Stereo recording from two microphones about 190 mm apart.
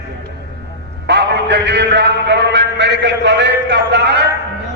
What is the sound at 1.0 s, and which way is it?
A man's voice, 65° right (ahead or behind).